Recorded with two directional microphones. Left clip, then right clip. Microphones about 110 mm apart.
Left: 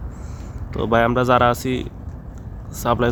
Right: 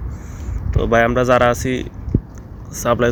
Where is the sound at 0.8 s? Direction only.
15° left (ahead or behind).